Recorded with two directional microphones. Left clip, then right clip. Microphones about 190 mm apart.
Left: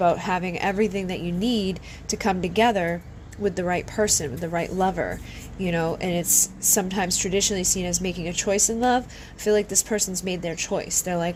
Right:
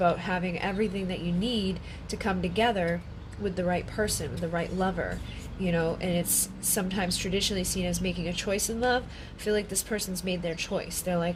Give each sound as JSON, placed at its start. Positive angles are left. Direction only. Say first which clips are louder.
{"t": 0.0, "sound": "a woman's voice", "louder": "left 5 dB", "side_deg": 40}